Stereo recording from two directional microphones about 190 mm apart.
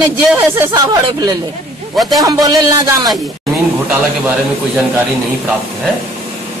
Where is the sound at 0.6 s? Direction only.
20° right (ahead or behind).